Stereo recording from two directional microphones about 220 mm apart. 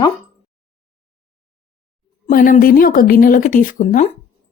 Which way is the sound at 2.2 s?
40° left (ahead or behind).